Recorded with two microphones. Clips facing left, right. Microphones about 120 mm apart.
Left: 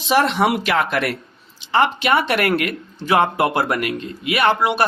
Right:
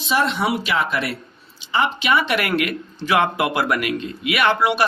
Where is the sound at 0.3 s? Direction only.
60° left (ahead or behind).